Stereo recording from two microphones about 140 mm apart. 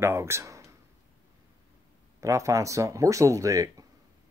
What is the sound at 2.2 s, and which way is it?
Speech, 20° right (ahead or behind).